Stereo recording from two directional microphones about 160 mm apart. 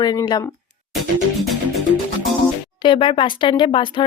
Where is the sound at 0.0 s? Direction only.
25° left (ahead or behind).